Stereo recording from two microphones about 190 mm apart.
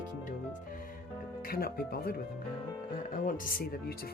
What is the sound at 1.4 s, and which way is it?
Speech, 50° left (ahead or behind).